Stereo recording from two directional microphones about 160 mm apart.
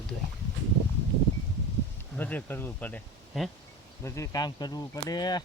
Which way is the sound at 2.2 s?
10° left (ahead or behind).